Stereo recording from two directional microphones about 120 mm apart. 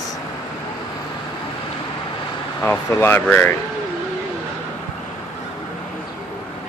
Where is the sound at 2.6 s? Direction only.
20° left (ahead or behind).